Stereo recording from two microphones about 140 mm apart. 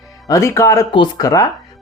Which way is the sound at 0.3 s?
20° left (ahead or behind).